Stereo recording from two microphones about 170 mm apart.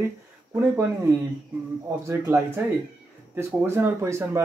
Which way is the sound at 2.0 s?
15° right (ahead or behind).